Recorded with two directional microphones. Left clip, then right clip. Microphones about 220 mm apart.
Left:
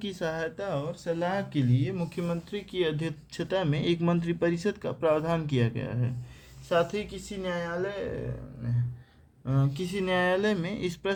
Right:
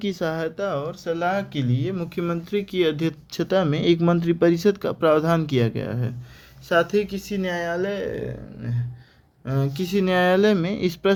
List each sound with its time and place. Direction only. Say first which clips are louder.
0.0 s speech: right 6 dB; 30° right (ahead or behind)
9.5 s speech: right 6 dB; 40° right (ahead or behind)